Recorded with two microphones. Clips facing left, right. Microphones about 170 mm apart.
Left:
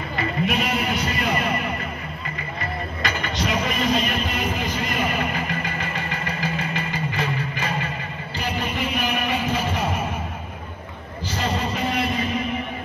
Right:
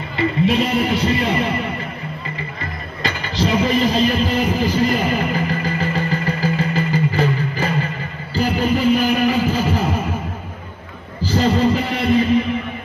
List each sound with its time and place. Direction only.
0.2 s music: 30° right (ahead or behind)
3.0 s a sound: 30° right (ahead or behind)
8.4 s music: 35° right (ahead or behind)
11.2 s music: 30° right (ahead or behind)